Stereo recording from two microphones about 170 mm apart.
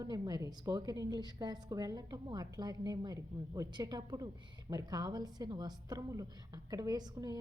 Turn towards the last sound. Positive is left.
turn(degrees=-25)  # may be behind; listen again after turning